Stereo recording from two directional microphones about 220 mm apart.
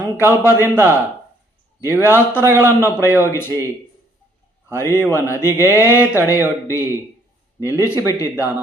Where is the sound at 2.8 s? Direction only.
10° left (ahead or behind).